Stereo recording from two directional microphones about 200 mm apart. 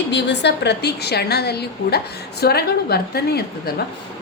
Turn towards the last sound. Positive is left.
turn(degrees=50)  # may be behind; listen again after turning